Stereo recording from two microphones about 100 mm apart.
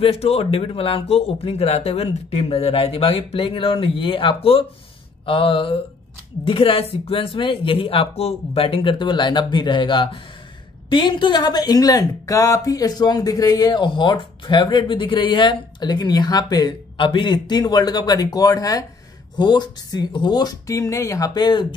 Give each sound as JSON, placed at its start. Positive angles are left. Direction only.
{"t": 0.0, "sound": "speech", "side_deg": 90}